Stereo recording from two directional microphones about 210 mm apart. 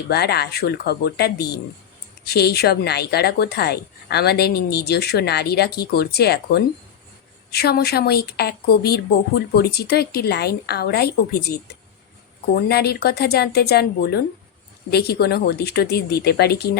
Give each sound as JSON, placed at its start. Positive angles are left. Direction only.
{"t": 0.1, "sound": "speech", "side_deg": 50}
{"t": 12.5, "sound": "speech", "side_deg": 50}